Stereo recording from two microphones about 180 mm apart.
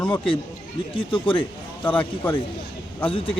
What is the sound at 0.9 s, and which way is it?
Speech, 30° left (ahead or behind).